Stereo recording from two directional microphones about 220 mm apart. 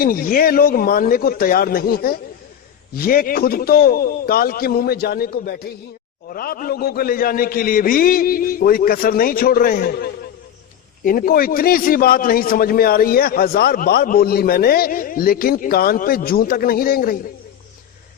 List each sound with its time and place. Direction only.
0.0 s a man's voice: 40° left (ahead or behind)